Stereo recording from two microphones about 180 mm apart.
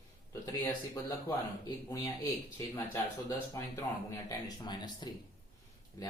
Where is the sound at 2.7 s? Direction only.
15° left (ahead or behind).